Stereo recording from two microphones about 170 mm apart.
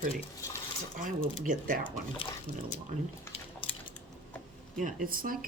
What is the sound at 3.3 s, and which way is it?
Drip, 30° left (ahead or behind).